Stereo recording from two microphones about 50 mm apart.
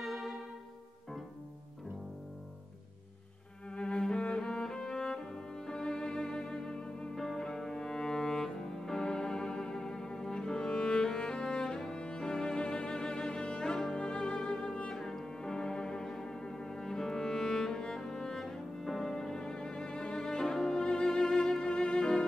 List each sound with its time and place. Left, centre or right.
0.0 s music: centre
3.7 s cello: centre
7.2 s music: centre